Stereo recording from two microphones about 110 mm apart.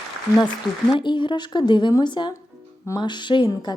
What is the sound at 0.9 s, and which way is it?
Speech, 45° left (ahead or behind).